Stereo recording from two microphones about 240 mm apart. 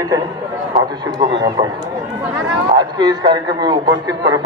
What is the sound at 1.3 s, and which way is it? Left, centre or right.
Speech, centre.